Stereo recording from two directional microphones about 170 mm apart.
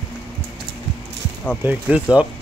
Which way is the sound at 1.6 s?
10° right (ahead or behind).